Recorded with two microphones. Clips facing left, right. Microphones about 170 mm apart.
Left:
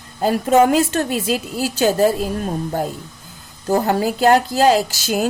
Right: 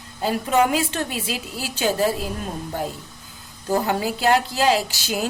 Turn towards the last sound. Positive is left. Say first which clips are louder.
# left 5 dB
turn(degrees=45)  # may be behind; listen again after turning